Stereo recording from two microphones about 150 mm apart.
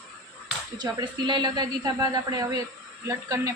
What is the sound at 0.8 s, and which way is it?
Speech, 30° right (ahead or behind).